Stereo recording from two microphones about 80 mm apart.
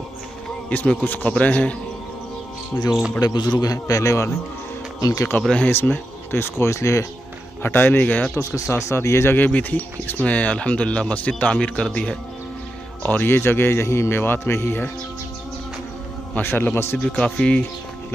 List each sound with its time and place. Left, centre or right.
0.7 s speech: centre
2.7 s speech: left
3.2 s a man's voice: left
5.6 s speech: left
7.6 s speech: left
8.4 s speech: left; by 12.2 s centre
13.1 s speech: left
16.3 s speech: left
17.0 s speech: centre